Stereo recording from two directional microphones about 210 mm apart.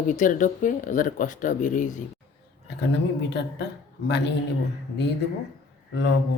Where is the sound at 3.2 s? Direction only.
55° left (ahead or behind).